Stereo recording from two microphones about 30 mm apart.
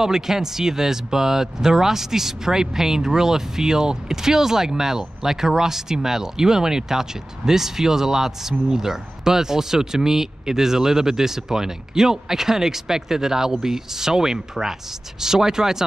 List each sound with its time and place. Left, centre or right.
0.0 s speech: centre